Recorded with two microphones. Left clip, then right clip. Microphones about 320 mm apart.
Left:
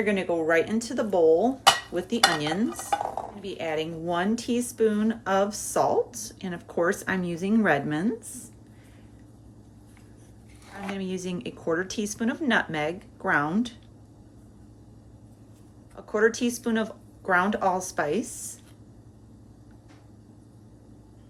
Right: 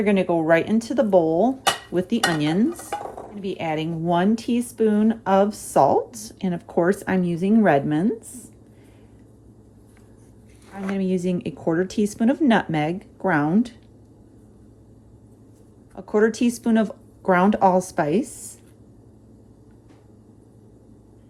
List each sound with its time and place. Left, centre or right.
0.0 s speech: centre
10.8 s speech: centre
16.0 s speech: centre